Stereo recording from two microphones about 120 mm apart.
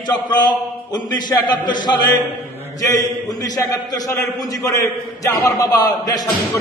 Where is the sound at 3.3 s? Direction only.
30° left (ahead or behind).